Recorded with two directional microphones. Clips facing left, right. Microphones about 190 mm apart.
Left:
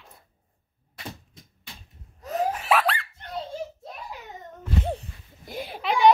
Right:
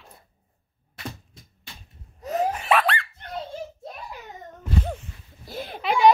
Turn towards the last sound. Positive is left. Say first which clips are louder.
# right 1 dB
turn(degrees=0)  # may be behind; listen again after turning